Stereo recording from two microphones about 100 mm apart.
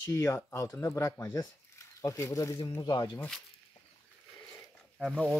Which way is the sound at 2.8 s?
50° left (ahead or behind).